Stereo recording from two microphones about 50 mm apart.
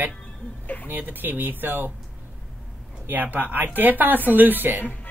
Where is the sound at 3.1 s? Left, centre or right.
Right.